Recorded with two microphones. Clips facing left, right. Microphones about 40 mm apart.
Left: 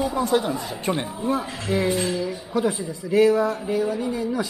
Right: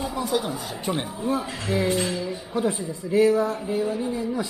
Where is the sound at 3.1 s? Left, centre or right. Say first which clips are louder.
Left 2 dB; left.